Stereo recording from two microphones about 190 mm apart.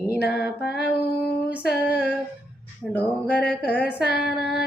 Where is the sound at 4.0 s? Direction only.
55° left (ahead or behind).